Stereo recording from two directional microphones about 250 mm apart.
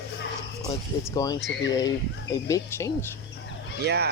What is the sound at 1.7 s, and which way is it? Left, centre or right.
Speech, centre.